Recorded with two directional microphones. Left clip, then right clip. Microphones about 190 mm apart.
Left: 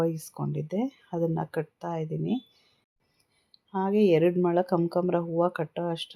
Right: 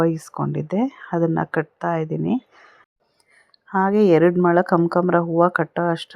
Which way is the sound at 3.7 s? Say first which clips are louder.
Right 7 dB; 25° right (ahead or behind).